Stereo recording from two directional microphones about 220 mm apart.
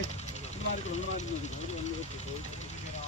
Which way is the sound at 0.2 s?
30° left (ahead or behind).